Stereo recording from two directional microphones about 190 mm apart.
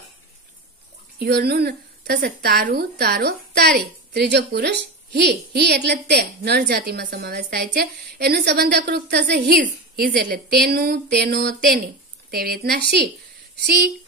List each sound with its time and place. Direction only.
1.2 s a woman's voice: 60° right (ahead or behind)